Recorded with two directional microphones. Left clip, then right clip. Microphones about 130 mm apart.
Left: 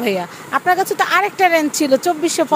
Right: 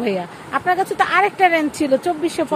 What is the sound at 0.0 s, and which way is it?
Speech, 15° left (ahead or behind).